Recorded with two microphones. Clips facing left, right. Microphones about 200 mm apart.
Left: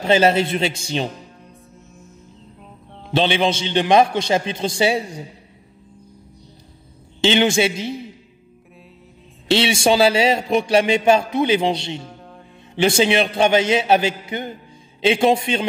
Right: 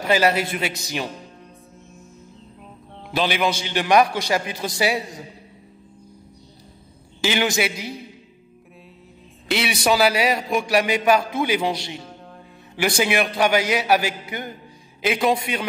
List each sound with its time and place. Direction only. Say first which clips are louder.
0.0 s a man's voice: left 4 dB; 25° left (ahead or behind)
3.1 s a man's voice: left 4 dB; 25° left (ahead or behind)
7.2 s a man's voice: left 5 dB; 25° left (ahead or behind)
9.5 s a man's voice: left 4 dB; 30° left (ahead or behind)